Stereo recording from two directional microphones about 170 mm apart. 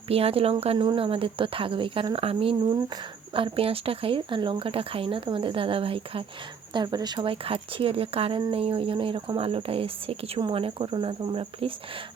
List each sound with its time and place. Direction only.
0.1 s speech: 35° right (ahead or behind)